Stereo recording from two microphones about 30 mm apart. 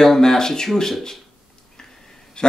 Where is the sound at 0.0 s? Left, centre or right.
Centre.